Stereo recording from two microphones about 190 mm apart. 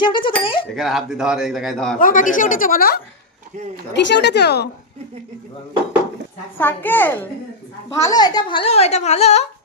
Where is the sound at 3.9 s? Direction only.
65° left (ahead or behind).